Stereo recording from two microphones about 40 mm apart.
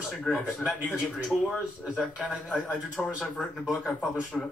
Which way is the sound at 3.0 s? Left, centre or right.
Centre.